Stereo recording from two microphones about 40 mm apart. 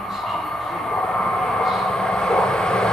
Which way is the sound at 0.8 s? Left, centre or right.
Centre.